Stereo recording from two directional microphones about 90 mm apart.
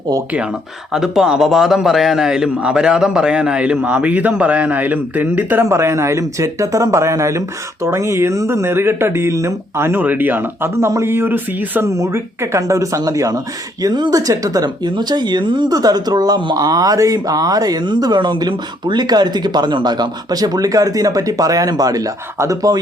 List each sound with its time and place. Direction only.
0.9 s a man's voice: 5° right (ahead or behind); by 11.9 s 25° right (ahead or behind)
11.9 s speech: 35° right (ahead or behind)